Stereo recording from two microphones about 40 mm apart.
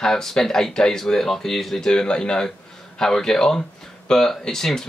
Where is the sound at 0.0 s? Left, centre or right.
Centre.